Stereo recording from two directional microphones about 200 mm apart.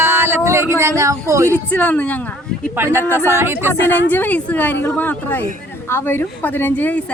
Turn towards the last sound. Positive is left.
turn(degrees=10)  # may be behind; listen again after turning